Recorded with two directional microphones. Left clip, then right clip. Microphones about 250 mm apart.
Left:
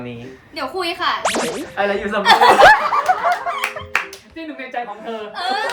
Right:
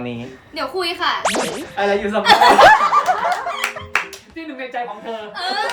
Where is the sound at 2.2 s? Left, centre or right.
Centre.